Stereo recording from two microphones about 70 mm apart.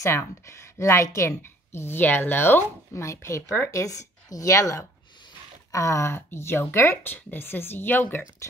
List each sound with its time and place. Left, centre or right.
0.0 s a woman's voice: left
1.4 s speech: left
2.9 s a woman's voice: left